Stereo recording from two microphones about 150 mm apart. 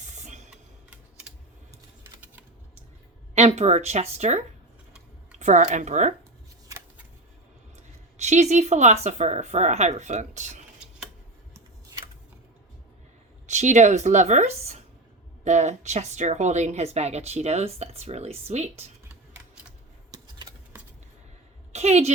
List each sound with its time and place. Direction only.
0.0 s a sound: 50° right (ahead or behind)
0.5 s typing: 5° right (ahead or behind)
3.3 s a woman's voice: 45° right (ahead or behind)
7.8 s speech: 50° right (ahead or behind)
13.5 s a woman's voice: 50° right (ahead or behind)
21.7 s a woman's voice: 45° right (ahead or behind)